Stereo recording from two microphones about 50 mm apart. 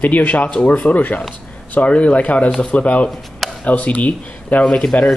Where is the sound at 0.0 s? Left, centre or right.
Left.